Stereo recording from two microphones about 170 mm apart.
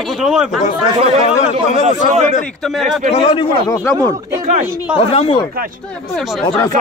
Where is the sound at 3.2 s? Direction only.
30° left (ahead or behind).